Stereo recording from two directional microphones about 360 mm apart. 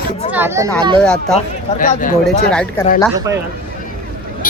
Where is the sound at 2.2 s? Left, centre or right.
Centre.